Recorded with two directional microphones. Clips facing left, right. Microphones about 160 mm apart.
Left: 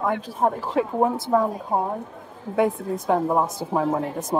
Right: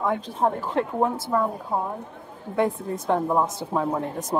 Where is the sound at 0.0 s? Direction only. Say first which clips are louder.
Left 1 dB; 5° left (ahead or behind).